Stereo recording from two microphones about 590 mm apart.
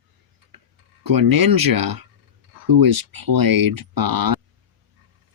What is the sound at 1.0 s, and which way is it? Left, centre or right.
Speech, right.